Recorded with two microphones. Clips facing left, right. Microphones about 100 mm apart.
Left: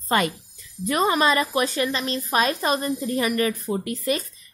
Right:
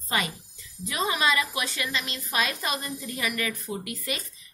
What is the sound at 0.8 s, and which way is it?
A woman's voice, 50° left (ahead or behind).